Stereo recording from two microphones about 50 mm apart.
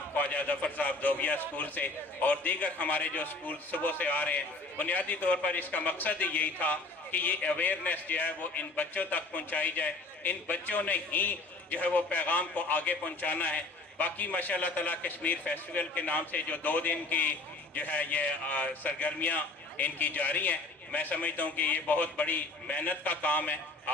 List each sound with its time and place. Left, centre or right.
0.2 s a man's voice: left